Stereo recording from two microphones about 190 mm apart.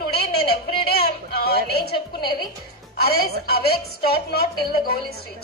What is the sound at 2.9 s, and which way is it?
Music, 55° left (ahead or behind).